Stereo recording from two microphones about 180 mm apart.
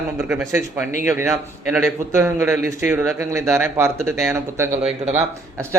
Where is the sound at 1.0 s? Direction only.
15° right (ahead or behind).